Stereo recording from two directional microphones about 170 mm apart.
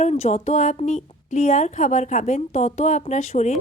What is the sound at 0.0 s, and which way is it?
Speech, 40° left (ahead or behind).